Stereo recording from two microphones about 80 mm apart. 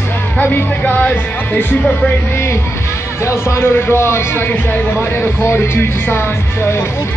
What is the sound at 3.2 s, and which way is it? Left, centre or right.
A man's voice, left.